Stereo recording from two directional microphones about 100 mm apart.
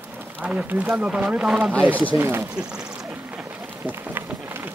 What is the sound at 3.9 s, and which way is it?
Run, 20° right (ahead or behind).